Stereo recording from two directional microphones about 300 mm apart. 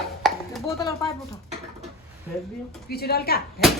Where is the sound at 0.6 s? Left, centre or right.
Centre.